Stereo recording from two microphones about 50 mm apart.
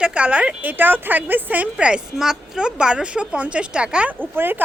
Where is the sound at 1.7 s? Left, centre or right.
Centre.